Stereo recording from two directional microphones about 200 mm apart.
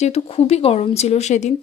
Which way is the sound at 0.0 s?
30° left (ahead or behind).